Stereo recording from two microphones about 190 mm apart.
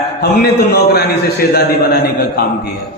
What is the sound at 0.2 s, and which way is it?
A man's voice, 60° left (ahead or behind).